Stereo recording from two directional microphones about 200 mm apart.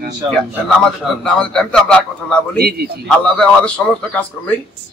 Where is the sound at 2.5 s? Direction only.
50° right (ahead or behind).